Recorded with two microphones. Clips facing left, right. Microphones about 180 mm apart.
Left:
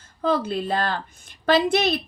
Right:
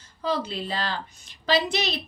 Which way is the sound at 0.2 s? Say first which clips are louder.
Left 5 dB; 50° left (ahead or behind).